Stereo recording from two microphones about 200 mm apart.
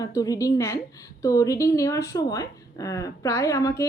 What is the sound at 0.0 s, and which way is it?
A woman's voice, 15° left (ahead or behind).